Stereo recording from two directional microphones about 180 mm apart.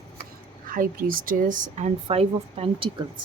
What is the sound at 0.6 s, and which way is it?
Speech, 50° right (ahead or behind).